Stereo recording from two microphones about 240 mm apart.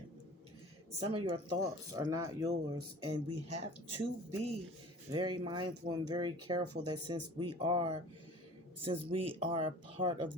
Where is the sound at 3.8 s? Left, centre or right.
Right.